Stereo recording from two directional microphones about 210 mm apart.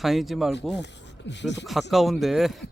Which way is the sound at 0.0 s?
Centre (ahead or behind).